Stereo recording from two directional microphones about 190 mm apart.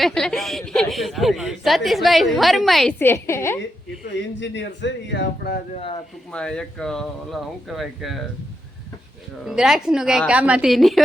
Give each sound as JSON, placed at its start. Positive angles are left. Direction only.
{"t": 0.0, "sound": "a woman's voice", "side_deg": 5}
{"t": 3.0, "sound": "a woman's voice", "side_deg": 15}
{"t": 4.4, "sound": "speech", "side_deg": 70}
{"t": 5.7, "sound": "speech", "side_deg": 30}
{"t": 6.3, "sound": "a woman's voice", "side_deg": 5}
{"t": 9.4, "sound": "a woman's voice", "side_deg": 0}